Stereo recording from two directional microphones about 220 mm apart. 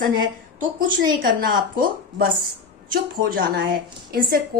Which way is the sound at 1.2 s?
40° right (ahead or behind).